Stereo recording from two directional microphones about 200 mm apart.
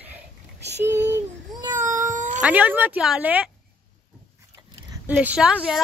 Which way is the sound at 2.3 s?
5° right (ahead or behind).